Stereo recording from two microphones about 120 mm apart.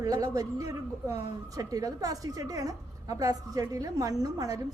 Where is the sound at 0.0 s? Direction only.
30° right (ahead or behind).